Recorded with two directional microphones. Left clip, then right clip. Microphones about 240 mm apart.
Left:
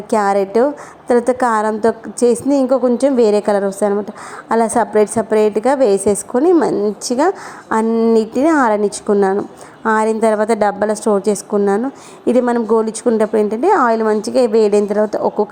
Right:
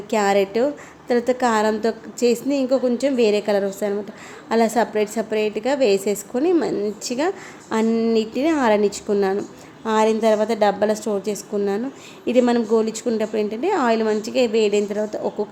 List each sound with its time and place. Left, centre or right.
0.1 s a woman's voice: left
9.8 s a woman's voice: left